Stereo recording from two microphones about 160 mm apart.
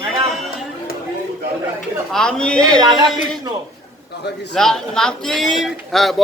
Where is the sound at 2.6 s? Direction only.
25° right (ahead or behind).